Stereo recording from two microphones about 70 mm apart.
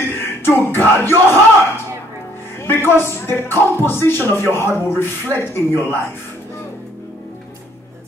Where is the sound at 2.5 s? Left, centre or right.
Left.